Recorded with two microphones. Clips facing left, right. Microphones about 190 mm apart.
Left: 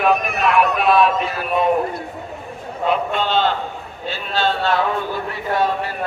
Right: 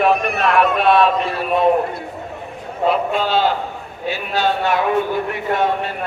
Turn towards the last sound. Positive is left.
turn(degrees=-20)  # may be behind; listen again after turning